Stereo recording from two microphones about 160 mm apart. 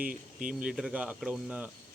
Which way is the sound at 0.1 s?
55° right (ahead or behind).